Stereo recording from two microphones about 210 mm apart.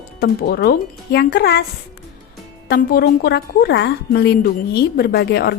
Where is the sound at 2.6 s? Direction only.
50° left (ahead or behind).